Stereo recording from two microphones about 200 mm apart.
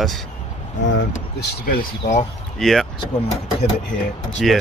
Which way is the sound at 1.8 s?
35° left (ahead or behind).